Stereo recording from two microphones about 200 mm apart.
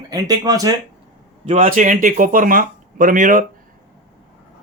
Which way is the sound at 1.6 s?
40° right (ahead or behind).